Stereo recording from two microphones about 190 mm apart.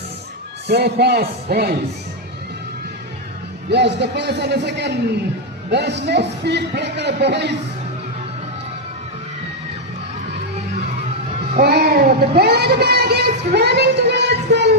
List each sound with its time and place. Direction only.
0.7 s speech: 60° right (ahead or behind)
3.7 s speech: 60° right (ahead or behind)
11.6 s speech: 55° right (ahead or behind)